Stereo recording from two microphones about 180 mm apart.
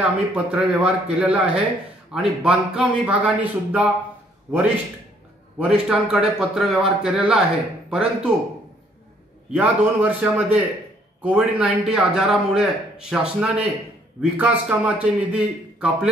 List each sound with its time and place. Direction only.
0.0 s a man's voice: 5° right (ahead or behind)
9.5 s a man's voice: 10° right (ahead or behind)